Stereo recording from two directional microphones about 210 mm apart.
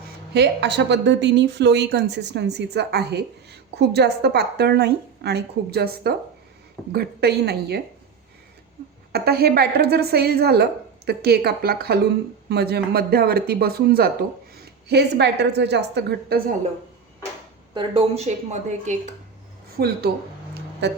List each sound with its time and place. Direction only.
0.3 s a woman's voice: 55° right (ahead or behind)
9.1 s a woman's voice: 45° right (ahead or behind)
17.7 s speech: 25° right (ahead or behind)
19.8 s a woman's voice: 45° right (ahead or behind)